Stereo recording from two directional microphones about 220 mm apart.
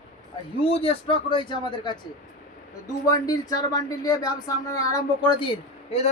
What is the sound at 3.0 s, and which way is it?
Speech, 15° left (ahead or behind).